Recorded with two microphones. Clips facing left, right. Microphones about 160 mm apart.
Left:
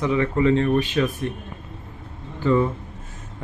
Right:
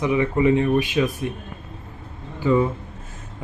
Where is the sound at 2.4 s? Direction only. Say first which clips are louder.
Right 1 dB; 10° right (ahead or behind).